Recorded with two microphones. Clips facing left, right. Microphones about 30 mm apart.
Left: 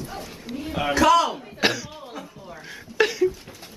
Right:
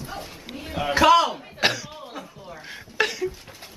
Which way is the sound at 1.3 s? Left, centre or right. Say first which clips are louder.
Even; centre.